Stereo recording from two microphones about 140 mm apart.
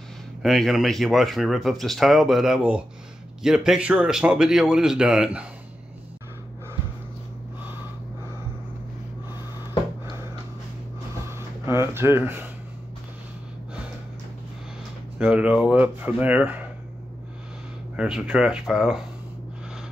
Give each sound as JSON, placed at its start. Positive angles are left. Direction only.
{"t": 0.4, "sound": "speech", "side_deg": 0}
{"t": 11.2, "sound": "a sound", "side_deg": -20}
{"t": 15.1, "sound": "speech", "side_deg": -10}
{"t": 17.9, "sound": "speech", "side_deg": -5}